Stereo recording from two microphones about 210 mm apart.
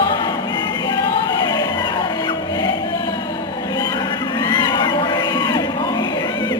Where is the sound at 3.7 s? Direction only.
20° left (ahead or behind).